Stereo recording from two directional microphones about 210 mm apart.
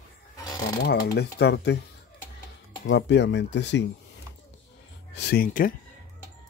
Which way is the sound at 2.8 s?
55° left (ahead or behind).